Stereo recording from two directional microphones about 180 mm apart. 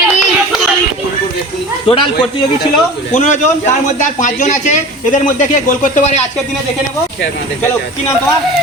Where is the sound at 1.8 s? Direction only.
30° left (ahead or behind).